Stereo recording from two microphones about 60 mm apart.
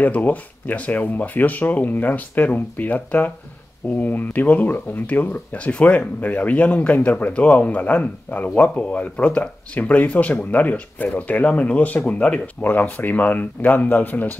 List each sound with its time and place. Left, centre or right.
0.0 s speech: left